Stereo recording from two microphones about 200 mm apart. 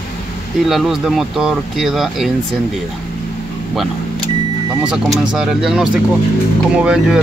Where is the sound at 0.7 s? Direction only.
Centre (ahead or behind).